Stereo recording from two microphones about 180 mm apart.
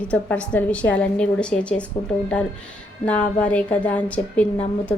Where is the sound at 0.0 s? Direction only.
5° left (ahead or behind).